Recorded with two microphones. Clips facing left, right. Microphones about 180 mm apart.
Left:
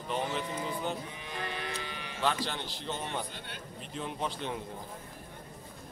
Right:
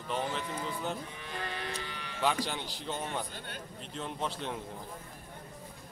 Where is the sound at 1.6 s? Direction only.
15° left (ahead or behind).